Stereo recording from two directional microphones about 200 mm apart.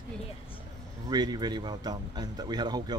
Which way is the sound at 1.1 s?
20° right (ahead or behind).